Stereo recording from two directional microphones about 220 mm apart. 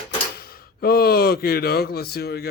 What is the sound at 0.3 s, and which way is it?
Speech, 45° left (ahead or behind).